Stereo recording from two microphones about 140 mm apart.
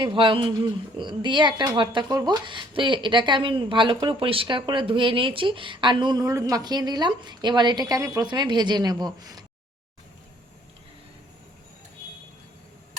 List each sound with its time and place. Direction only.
0.0 s speech: 35° right (ahead or behind)